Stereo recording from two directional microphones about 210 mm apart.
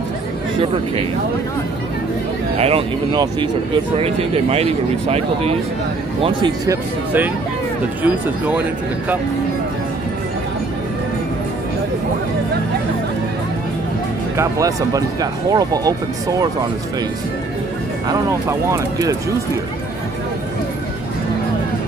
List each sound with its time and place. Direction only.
2.5 s speech: 30° right (ahead or behind); by 8.6 s 5° right (ahead or behind)
14.3 s speech: 15° right (ahead or behind)
18.0 s speech: 15° right (ahead or behind)